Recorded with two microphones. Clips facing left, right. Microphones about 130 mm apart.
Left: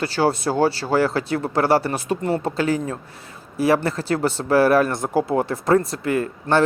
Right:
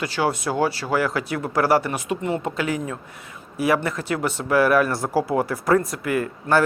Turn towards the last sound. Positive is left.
turn(degrees=30)  # may be behind; listen again after turning